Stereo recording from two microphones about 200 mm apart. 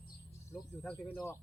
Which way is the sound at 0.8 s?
5° left (ahead or behind).